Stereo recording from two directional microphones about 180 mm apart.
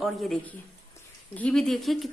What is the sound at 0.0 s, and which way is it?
A woman's voice, centre (ahead or behind).